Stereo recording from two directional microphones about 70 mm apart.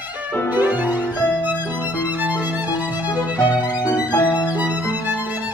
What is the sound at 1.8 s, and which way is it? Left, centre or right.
Music, right.